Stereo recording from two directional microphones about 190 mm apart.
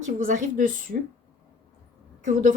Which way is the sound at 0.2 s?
40° right (ahead or behind).